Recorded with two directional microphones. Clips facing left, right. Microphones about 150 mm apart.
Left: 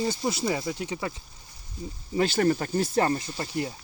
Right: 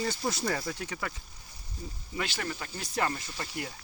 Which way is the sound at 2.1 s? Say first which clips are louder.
Left 12 dB; 40° left (ahead or behind).